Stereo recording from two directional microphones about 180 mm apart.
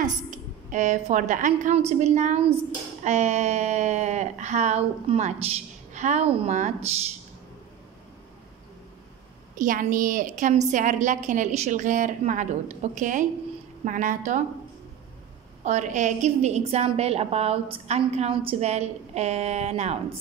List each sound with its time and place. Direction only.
0.0 s a woman's voice: 45° right (ahead or behind)
9.6 s a woman's voice: 45° right (ahead or behind)
15.6 s a woman's voice: 40° right (ahead or behind)